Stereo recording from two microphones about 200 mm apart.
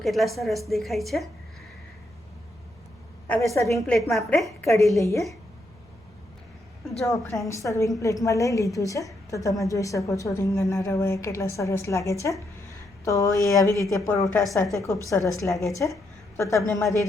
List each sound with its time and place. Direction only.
0.0 s a woman's voice: centre (ahead or behind)
3.2 s a woman's voice: 10° left (ahead or behind)
4.1 s a woman's voice: centre (ahead or behind)
4.9 s a woman's voice: 15° left (ahead or behind)
7.0 s a woman's voice: 15° left (ahead or behind)